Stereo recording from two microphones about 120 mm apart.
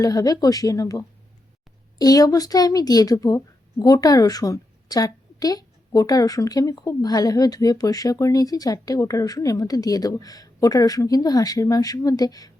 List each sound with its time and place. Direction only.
0.0 s a woman's voice: 30° left (ahead or behind)